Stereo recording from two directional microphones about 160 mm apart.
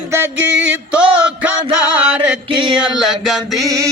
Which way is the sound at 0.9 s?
5° right (ahead or behind).